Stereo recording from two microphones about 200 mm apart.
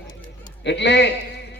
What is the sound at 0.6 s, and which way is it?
Speech, 60° left (ahead or behind).